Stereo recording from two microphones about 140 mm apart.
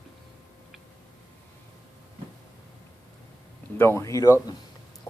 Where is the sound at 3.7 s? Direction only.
15° left (ahead or behind).